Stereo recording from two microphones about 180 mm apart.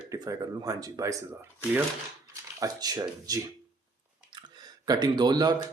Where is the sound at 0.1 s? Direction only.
20° right (ahead or behind).